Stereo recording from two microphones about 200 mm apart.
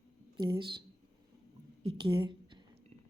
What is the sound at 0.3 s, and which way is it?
Speech, 20° right (ahead or behind).